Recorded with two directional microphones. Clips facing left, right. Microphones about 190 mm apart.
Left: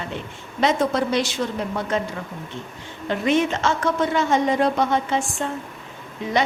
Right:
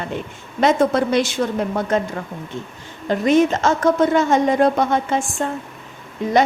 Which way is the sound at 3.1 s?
40° right (ahead or behind).